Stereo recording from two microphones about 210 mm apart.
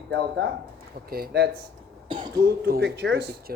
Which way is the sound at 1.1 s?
45° right (ahead or behind).